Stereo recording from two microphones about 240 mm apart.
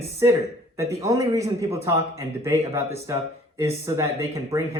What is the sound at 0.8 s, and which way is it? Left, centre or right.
Speech, centre.